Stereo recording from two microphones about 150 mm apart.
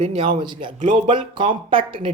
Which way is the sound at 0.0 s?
40° right (ahead or behind).